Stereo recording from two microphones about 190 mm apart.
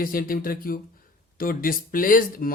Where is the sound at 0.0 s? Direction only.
50° left (ahead or behind).